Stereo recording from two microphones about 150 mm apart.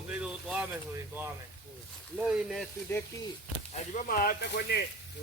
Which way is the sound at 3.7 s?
60° left (ahead or behind).